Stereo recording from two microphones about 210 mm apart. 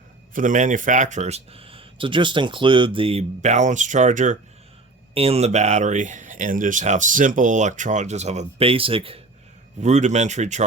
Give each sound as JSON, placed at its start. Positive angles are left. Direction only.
{"t": 0.3, "sound": "speech", "side_deg": -40}